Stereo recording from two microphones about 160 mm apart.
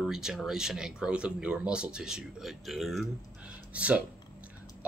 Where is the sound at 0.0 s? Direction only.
5° right (ahead or behind).